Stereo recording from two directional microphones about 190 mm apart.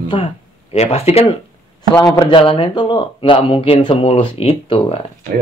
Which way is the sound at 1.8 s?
20° left (ahead or behind).